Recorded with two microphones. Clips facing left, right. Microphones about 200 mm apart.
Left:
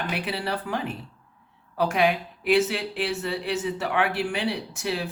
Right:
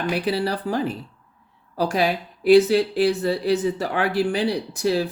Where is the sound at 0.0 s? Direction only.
35° right (ahead or behind).